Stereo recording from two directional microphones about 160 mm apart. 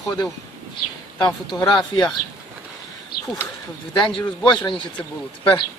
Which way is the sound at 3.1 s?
70° left (ahead or behind).